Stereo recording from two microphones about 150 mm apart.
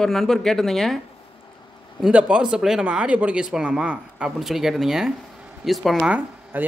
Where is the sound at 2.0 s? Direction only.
5° right (ahead or behind).